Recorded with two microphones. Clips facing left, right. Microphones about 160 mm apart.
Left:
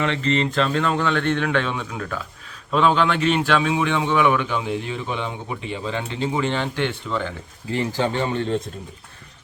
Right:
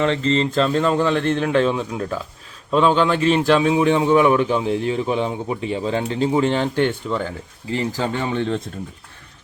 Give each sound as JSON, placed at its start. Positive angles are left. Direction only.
{"t": 0.0, "sound": "speech", "side_deg": -30}